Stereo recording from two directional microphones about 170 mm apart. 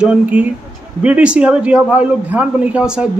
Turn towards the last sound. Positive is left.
turn(degrees=-5)  # may be behind; listen again after turning